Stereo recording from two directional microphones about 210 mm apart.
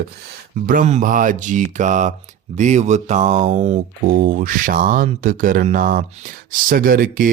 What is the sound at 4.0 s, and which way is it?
Speech, 40° right (ahead or behind).